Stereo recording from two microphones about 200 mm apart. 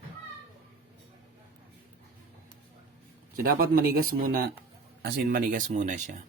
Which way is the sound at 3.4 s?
50° right (ahead or behind).